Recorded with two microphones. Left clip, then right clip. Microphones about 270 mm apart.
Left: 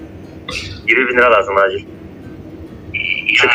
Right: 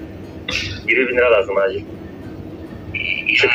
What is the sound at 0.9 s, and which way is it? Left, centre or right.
Speech, left.